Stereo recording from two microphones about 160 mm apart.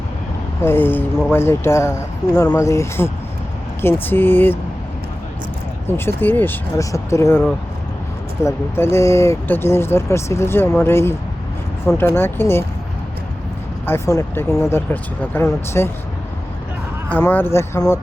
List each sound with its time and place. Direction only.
0.6 s speech: 15° left (ahead or behind)
6.1 s speech: 10° left (ahead or behind)
8.4 s speech: 15° left (ahead or behind)
13.8 s speech: 15° left (ahead or behind)
17.1 s speech: 10° left (ahead or behind)